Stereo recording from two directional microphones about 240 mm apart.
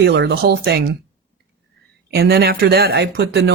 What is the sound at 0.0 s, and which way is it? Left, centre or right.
Speech, right.